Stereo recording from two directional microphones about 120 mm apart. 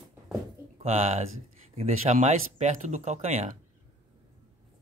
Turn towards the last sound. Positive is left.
turn(degrees=-65)  # may be behind; listen again after turning